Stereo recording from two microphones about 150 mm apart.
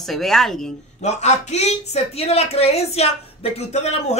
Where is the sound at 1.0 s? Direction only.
50° left (ahead or behind).